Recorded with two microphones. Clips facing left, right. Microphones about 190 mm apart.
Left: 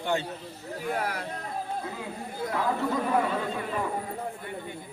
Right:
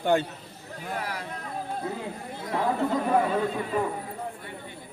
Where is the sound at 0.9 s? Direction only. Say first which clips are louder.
Left 2 dB; 50° left (ahead or behind).